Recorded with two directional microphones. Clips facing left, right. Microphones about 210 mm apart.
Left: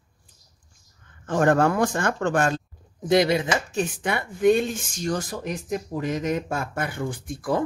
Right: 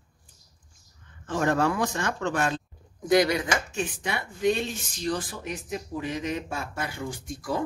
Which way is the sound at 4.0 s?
55° left (ahead or behind).